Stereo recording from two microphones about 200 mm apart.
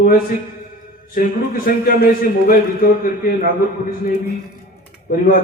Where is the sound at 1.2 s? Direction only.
45° left (ahead or behind).